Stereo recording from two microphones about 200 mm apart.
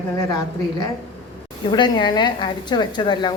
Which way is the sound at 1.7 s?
20° left (ahead or behind).